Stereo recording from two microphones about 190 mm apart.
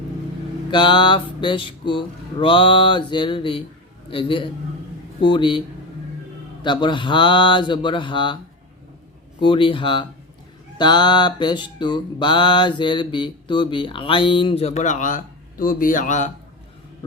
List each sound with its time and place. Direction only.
0.7 s music: 25° left (ahead or behind)
9.4 s music: 25° left (ahead or behind)